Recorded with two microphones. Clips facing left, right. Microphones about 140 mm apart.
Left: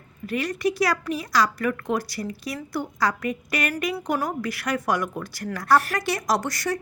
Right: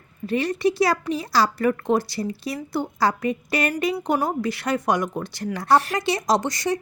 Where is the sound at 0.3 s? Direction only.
25° right (ahead or behind).